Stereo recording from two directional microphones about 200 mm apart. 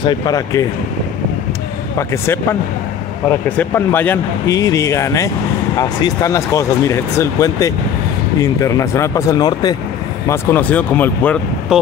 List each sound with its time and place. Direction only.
0.0 s speech: 20° left (ahead or behind)
3.3 s speech: 10° left (ahead or behind)
11.7 s speech: 5° right (ahead or behind)